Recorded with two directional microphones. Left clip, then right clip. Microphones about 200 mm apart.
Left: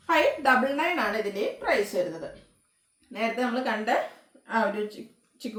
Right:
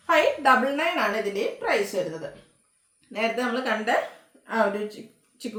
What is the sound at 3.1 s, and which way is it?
A woman's voice, 15° right (ahead or behind).